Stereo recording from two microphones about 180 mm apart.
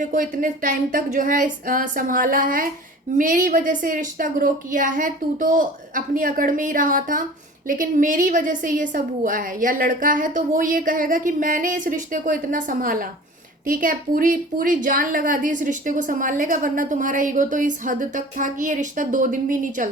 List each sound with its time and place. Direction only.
0.0 s a woman's voice: 45° right (ahead or behind)